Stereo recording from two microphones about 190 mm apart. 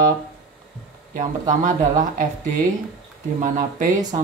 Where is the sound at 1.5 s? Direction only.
45° right (ahead or behind).